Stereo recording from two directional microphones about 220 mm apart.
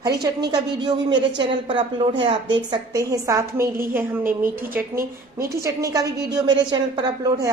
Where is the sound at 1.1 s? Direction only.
55° right (ahead or behind).